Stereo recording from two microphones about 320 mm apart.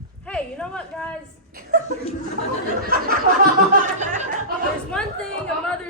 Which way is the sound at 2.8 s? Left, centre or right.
Right.